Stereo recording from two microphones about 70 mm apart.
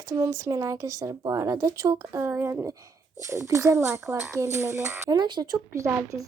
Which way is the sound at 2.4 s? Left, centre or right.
Right.